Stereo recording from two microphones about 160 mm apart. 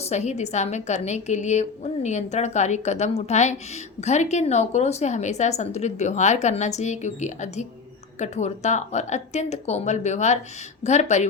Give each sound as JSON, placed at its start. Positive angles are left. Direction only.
{"t": 0.0, "sound": "a woman's voice", "side_deg": 45}